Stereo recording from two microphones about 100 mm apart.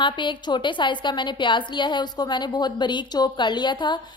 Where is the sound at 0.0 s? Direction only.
50° left (ahead or behind).